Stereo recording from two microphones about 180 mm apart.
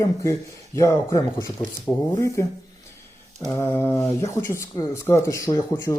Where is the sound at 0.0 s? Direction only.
15° left (ahead or behind).